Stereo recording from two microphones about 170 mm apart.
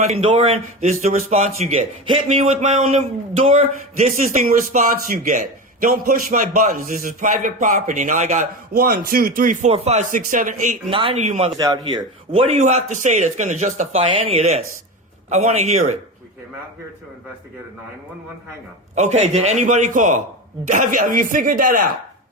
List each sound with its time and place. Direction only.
0.2 s a man's voice: 35° right (ahead or behind)
10.9 s speech: 35° right (ahead or behind)
11.5 s speech: 25° right (ahead or behind)
12.5 s a man's voice: 40° right (ahead or behind)
18.9 s a man's voice: 45° right (ahead or behind)